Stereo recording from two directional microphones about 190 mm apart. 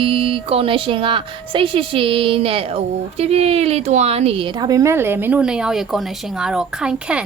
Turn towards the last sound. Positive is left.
turn(degrees=-5)  # may be behind; listen again after turning